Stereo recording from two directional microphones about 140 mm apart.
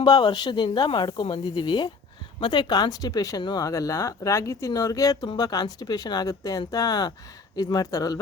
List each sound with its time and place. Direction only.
0.0 s speech: 30° left (ahead or behind)